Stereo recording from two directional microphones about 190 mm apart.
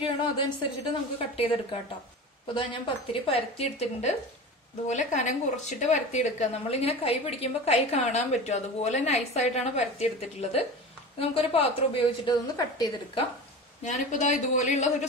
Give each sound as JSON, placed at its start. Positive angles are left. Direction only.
{"t": 1.1, "sound": "a woman's voice", "side_deg": 30}
{"t": 13.8, "sound": "a woman's voice", "side_deg": 40}